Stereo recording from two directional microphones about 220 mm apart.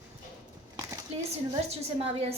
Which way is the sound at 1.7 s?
30° right (ahead or behind).